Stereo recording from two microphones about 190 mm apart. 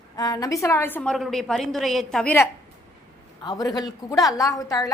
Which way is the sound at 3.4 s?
20° left (ahead or behind).